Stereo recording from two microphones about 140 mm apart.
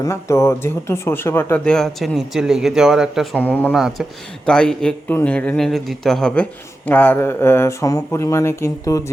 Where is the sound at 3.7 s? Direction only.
5° right (ahead or behind).